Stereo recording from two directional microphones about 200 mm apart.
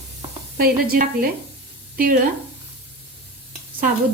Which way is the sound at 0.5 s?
45° right (ahead or behind).